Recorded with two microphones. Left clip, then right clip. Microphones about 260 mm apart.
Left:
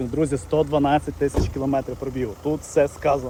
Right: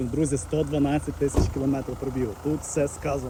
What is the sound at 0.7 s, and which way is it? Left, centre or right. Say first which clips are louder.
Speech: left 7 dB; left.